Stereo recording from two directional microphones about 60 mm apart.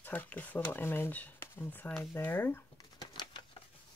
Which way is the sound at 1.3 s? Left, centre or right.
Left.